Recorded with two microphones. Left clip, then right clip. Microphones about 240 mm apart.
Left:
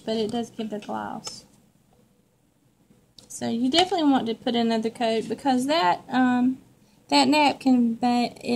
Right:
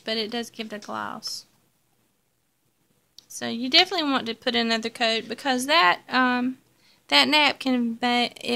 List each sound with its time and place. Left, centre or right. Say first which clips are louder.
0.0 s a woman's voice: left 1 dB; right
3.4 s a woman's voice: right 2 dB; right